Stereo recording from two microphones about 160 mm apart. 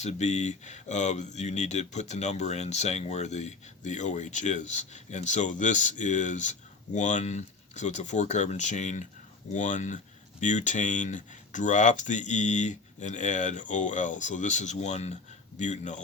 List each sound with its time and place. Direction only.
0.0 s speech: 45° left (ahead or behind)